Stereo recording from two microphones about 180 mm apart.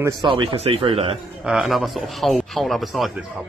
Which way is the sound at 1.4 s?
5° right (ahead or behind).